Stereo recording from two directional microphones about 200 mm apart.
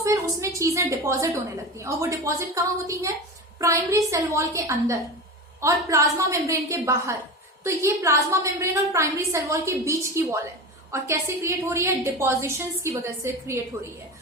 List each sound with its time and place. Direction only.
0.0 s a woman's voice: 15° right (ahead or behind)